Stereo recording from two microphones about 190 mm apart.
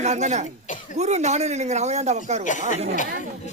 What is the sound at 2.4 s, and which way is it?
Speech, 40° left (ahead or behind).